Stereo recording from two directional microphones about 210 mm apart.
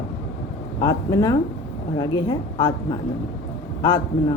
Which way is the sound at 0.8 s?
15° left (ahead or behind).